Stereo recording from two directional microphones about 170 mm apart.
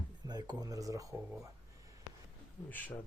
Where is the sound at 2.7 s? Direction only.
10° left (ahead or behind).